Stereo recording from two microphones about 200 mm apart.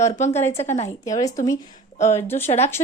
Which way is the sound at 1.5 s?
35° left (ahead or behind).